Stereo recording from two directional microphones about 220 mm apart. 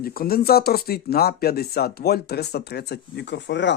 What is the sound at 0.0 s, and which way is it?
Speech, 45° left (ahead or behind).